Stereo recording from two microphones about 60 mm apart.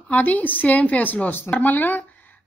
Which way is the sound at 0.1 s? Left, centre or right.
Left.